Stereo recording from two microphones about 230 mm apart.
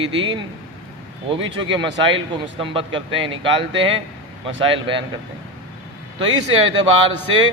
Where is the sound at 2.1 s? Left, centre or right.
Right.